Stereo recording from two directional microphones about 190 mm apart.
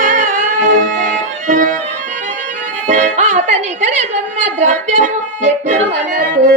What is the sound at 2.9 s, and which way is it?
Music, 40° right (ahead or behind).